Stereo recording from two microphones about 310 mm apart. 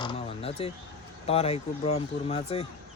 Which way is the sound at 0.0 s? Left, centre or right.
Centre.